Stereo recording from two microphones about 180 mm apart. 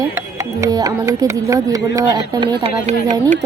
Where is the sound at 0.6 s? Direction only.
20° right (ahead or behind).